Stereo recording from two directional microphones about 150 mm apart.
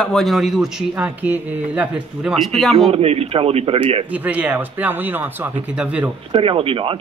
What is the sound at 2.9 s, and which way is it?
A man's voice, 40° right (ahead or behind).